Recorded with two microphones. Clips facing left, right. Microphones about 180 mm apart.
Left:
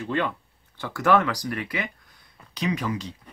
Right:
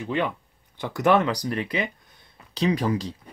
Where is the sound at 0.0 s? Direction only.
15° right (ahead or behind); by 3.2 s 35° right (ahead or behind).